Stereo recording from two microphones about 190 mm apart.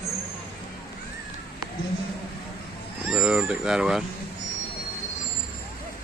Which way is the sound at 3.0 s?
5° right (ahead or behind).